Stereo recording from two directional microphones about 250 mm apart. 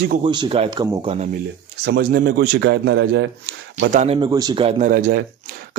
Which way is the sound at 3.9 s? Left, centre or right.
Right.